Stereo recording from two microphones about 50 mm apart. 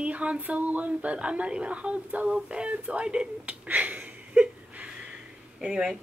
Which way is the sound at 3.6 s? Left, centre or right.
Right.